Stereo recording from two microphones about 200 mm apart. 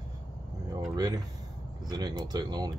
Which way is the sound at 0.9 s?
20° right (ahead or behind).